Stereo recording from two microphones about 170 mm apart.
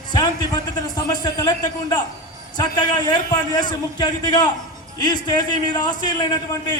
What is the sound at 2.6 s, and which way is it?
A man's voice, 25° left (ahead or behind).